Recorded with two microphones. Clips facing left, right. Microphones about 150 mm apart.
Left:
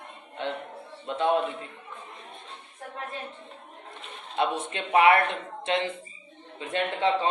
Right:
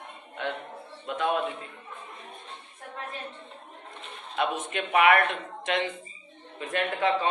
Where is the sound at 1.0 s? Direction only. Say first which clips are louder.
Left 3 dB; 30° left (ahead or behind).